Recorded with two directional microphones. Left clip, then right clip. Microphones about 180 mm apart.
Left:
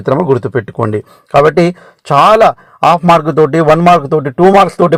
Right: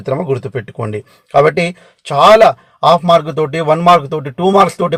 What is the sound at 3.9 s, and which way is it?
Speech, 30° left (ahead or behind).